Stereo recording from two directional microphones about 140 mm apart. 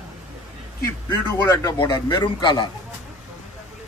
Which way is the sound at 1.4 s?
25° left (ahead or behind).